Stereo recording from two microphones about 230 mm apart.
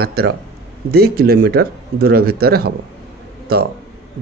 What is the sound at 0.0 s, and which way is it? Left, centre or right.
Speech, right.